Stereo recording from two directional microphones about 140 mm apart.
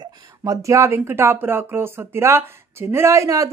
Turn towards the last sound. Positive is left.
turn(degrees=-25)  # may be behind; listen again after turning